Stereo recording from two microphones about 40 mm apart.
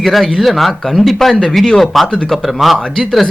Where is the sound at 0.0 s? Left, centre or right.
Centre.